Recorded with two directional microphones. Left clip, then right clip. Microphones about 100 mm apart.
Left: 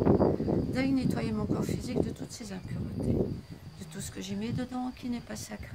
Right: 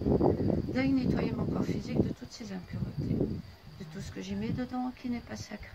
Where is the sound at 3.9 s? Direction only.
20° left (ahead or behind).